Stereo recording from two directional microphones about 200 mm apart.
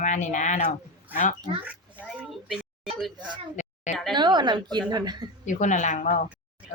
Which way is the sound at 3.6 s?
35° left (ahead or behind).